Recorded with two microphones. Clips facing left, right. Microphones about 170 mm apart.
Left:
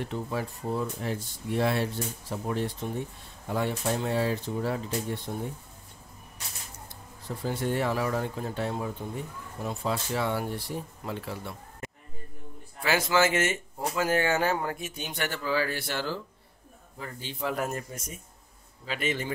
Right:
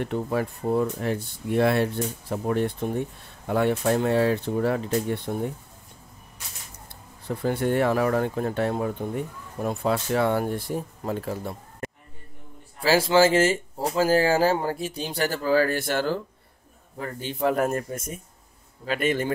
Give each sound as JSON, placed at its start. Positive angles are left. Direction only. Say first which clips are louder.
{"t": 0.0, "sound": "speech", "louder": "right 6 dB", "side_deg": -60}
{"t": 7.2, "sound": "speech", "louder": "right 6 dB", "side_deg": -60}
{"t": 12.8, "sound": "speech", "louder": "right 6 dB", "side_deg": -30}